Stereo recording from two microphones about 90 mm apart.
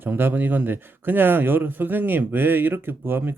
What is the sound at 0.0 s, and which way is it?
Speech, 25° right (ahead or behind).